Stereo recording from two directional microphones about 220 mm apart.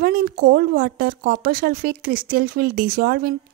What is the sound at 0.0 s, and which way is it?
Speech, 40° right (ahead or behind).